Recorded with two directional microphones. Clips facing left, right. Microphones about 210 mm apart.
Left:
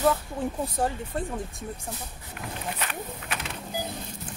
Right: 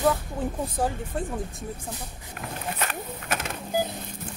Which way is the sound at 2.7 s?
45° right (ahead or behind).